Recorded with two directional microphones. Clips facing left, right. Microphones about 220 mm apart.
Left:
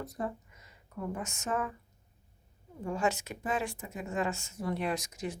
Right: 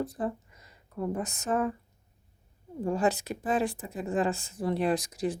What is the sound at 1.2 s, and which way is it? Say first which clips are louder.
Speech: right 5 dB; 35° right (ahead or behind).